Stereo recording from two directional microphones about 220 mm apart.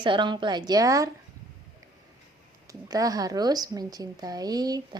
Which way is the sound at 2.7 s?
15° right (ahead or behind).